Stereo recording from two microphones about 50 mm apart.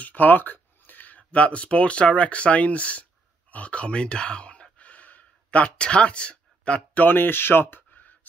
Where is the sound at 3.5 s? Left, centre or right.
Left.